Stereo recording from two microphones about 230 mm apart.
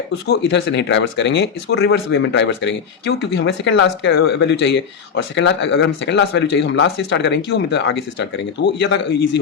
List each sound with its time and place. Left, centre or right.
0.3 s speech: left